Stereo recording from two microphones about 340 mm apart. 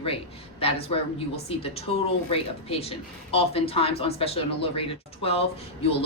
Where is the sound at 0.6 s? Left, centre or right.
Centre.